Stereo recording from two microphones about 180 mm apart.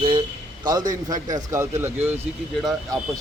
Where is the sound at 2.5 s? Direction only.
Centre (ahead or behind).